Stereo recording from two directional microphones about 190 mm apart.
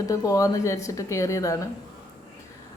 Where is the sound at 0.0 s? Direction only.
15° left (ahead or behind).